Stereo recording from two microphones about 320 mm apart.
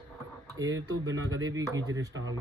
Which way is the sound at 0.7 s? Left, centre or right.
Centre.